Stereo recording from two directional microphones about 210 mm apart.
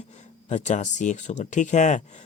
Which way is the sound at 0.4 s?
35° left (ahead or behind).